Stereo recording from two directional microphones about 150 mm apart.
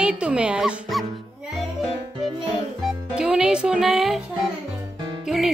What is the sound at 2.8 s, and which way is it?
Speech, 5° right (ahead or behind).